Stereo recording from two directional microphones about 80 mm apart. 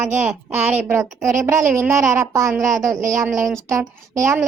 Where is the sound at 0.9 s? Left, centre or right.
Right.